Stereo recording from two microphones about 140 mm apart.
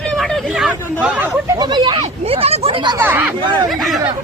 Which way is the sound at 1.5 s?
30° right (ahead or behind).